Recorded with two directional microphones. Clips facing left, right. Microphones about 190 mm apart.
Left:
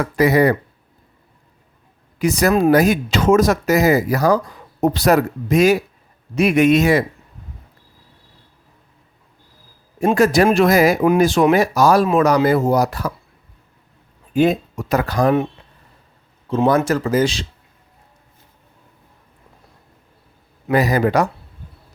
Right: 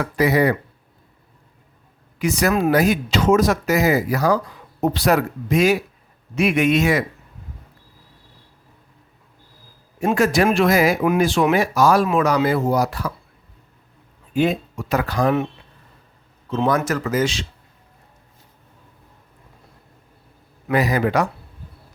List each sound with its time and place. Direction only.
0.0 s speech: 45° left (ahead or behind)
2.1 s speech: 35° left (ahead or behind)
10.0 s speech: 35° left (ahead or behind)
14.3 s speech: 45° left (ahead or behind)
16.5 s speech: 30° left (ahead or behind)
20.7 s speech: 35° left (ahead or behind)